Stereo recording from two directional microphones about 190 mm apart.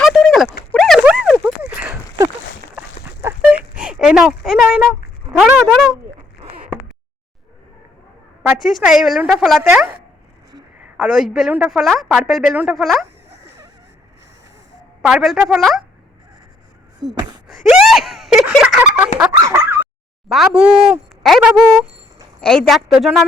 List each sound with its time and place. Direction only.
0.0 s a sound: centre (ahead or behind)
5.6 s a woman's voice: centre (ahead or behind)
8.5 s a woman's voice: centre (ahead or behind)
15.0 s a woman's voice: centre (ahead or behind)
17.5 s a sound: centre (ahead or behind)
19.4 s bow-wow: 15° right (ahead or behind)
20.2 s a woman's voice: 5° right (ahead or behind)